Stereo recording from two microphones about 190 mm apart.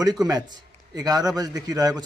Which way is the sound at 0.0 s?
20° right (ahead or behind).